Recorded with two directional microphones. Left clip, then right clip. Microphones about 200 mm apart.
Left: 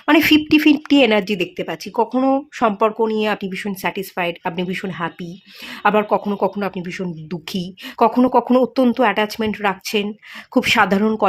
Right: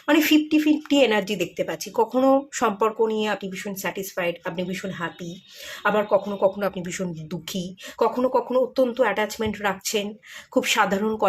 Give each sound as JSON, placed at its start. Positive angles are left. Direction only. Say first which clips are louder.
{"t": 0.0, "sound": "speech", "louder": "left 5 dB", "side_deg": 40}
{"t": 0.9, "sound": "speech", "louder": "left 5 dB", "side_deg": 30}
{"t": 7.5, "sound": "speech", "louder": "left 5 dB", "side_deg": 50}